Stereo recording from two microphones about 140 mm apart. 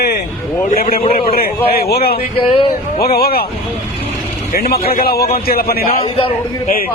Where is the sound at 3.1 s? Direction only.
90° left.